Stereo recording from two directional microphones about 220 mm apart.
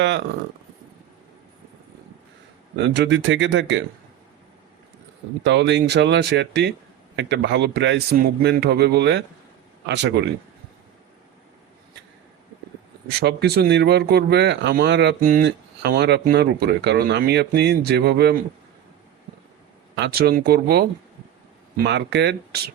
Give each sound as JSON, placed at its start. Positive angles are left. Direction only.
{"t": 2.8, "sound": "speech", "side_deg": -55}
{"t": 5.4, "sound": "speech", "side_deg": -55}
{"t": 13.1, "sound": "speech", "side_deg": -45}
{"t": 20.0, "sound": "speech", "side_deg": -45}